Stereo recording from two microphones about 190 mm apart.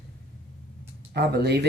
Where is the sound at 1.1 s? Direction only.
60° right (ahead or behind).